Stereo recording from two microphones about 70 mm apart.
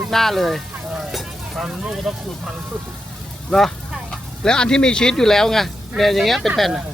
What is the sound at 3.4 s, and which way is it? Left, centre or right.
Speech, centre.